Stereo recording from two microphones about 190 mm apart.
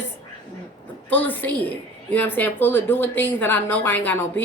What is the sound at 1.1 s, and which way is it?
A woman's voice, 10° left (ahead or behind).